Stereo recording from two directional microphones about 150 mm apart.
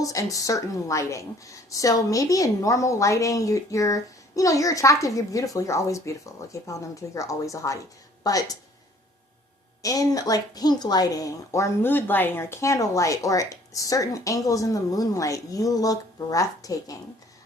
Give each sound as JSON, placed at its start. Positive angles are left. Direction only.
{"t": 0.0, "sound": "a woman's voice", "side_deg": 20}
{"t": 9.8, "sound": "a woman's voice", "side_deg": 25}